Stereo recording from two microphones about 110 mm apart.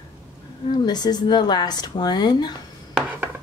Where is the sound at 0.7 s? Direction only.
40° left (ahead or behind).